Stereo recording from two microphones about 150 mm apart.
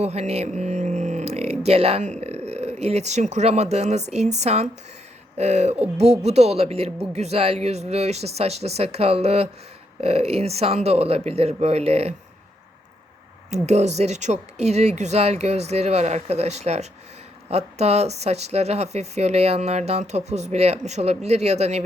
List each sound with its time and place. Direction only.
0.0 s a sound: 45° right (ahead or behind)
2.2 s speech: 45° right (ahead or behind)
13.5 s speech: 50° right (ahead or behind)